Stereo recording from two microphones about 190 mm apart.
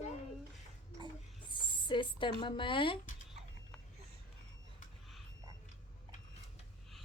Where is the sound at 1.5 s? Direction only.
25° left (ahead or behind).